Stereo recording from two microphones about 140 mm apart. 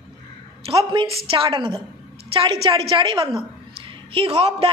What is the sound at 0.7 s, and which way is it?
A woman's voice, 40° right (ahead or behind).